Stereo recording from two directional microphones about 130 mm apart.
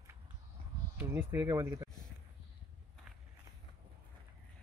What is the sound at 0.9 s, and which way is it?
Speech, 20° right (ahead or behind).